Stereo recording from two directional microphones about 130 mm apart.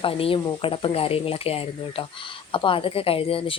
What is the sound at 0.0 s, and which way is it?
Speech, 45° left (ahead or behind).